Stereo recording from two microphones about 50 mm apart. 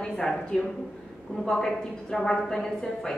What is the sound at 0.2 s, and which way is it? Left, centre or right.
A woman's voice, centre.